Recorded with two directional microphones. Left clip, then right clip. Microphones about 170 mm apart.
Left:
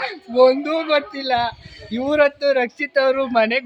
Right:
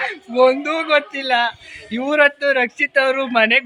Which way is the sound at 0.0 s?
10° left (ahead or behind).